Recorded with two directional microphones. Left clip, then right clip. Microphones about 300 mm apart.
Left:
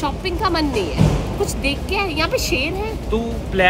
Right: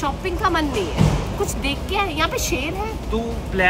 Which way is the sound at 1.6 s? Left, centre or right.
Right.